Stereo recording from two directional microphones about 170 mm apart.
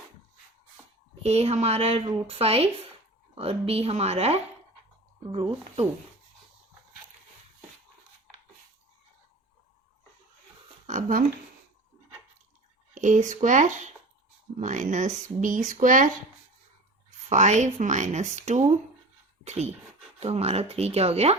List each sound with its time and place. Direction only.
1.2 s speech: 35° right (ahead or behind)
10.8 s a sound: 50° right (ahead or behind)
12.9 s speech: 45° right (ahead or behind)
17.2 s speech: 45° right (ahead or behind)